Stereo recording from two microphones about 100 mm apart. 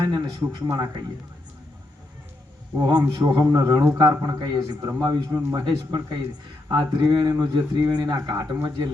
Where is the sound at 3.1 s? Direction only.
40° right (ahead or behind).